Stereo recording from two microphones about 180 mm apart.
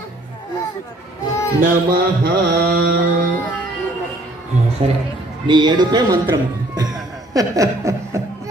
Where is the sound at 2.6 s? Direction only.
60° right (ahead or behind).